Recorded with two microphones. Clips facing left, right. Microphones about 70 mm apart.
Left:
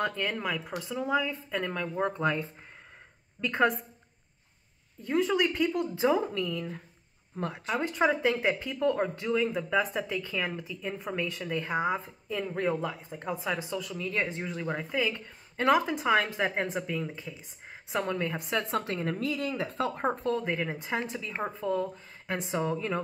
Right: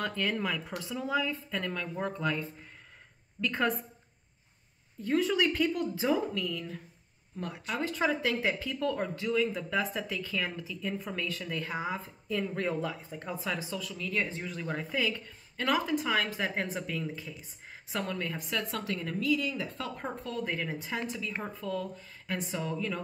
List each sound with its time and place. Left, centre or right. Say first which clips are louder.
0.0 s speech: left 1 dB; centre; by 3.7 s left
5.0 s speech: left 1 dB; centre
5.7 s a woman's voice: left 3 dB; left
8.1 s speech: left 3 dB; centre
14.8 s speech: even; centre
15.5 s a woman's voice: left 4 dB; left